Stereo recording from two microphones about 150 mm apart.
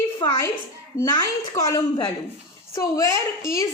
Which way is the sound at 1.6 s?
25° left (ahead or behind).